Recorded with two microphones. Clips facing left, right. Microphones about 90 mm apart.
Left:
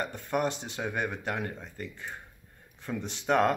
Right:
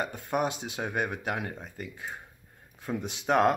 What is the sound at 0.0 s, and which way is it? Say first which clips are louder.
Speech: right 1 dB; 10° right (ahead or behind).